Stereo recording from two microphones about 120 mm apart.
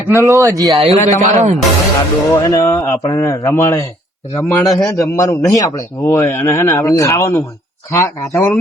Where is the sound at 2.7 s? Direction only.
25° left (ahead or behind).